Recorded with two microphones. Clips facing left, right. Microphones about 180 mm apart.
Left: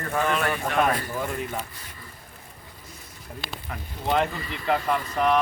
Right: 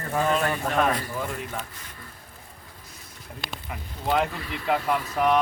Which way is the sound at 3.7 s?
5° right (ahead or behind).